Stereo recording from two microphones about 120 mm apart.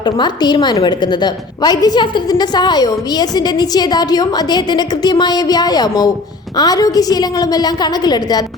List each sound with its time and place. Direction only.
0.0 s a woman's voice: 35° left (ahead or behind)